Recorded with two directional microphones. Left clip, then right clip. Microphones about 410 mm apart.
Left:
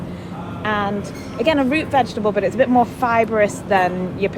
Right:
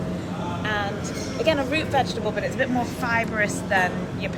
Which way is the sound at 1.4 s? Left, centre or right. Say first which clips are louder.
Left 5 dB; centre.